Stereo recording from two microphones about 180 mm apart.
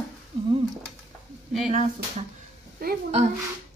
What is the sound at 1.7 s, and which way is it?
Speech, 40° right (ahead or behind).